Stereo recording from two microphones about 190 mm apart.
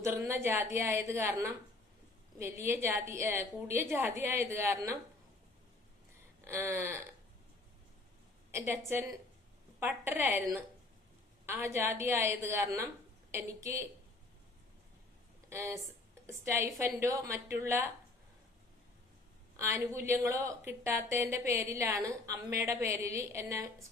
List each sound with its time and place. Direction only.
0.0 s a woman's voice: 15° right (ahead or behind)
6.4 s a sound: 15° right (ahead or behind)
8.9 s a woman's voice: 10° right (ahead or behind)
15.4 s a woman's voice: 15° right (ahead or behind)
19.5 s a woman's voice: 15° right (ahead or behind)